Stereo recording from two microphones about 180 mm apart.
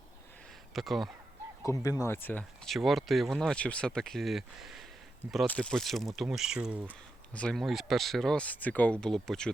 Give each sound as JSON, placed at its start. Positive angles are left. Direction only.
{"t": 0.7, "sound": "speech", "side_deg": 0}
{"t": 1.6, "sound": "speech", "side_deg": 20}
{"t": 7.3, "sound": "speech", "side_deg": 5}